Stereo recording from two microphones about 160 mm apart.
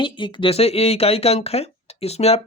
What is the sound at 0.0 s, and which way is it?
A man's voice, 30° left (ahead or behind).